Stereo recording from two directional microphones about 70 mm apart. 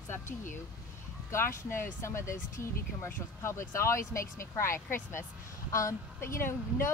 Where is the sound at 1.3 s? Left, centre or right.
Left.